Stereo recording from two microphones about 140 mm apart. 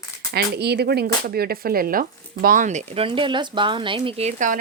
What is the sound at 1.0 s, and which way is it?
Speech, 90° right.